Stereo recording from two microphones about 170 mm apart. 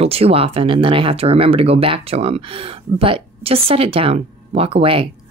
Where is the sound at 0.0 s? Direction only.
35° right (ahead or behind).